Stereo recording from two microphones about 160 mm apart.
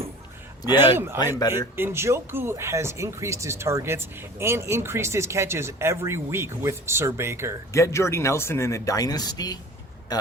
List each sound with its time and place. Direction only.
0.8 s speech: 15° right (ahead or behind)
7.7 s speech: 20° left (ahead or behind)